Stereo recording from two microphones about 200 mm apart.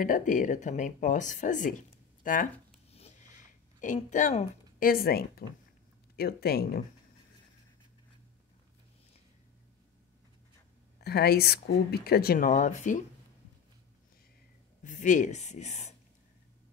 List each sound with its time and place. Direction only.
0.0 s speech: 40° left (ahead or behind)
3.8 s speech: 40° left (ahead or behind)
11.0 s speech: 50° left (ahead or behind)
14.8 s speech: 40° left (ahead or behind)